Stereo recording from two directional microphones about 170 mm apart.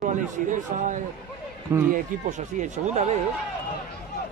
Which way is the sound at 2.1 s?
50° right (ahead or behind).